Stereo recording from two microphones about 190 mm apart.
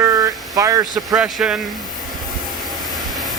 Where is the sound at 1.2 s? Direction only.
5° right (ahead or behind).